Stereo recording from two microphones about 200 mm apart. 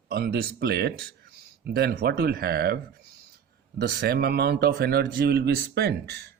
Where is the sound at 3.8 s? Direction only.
55° right (ahead or behind).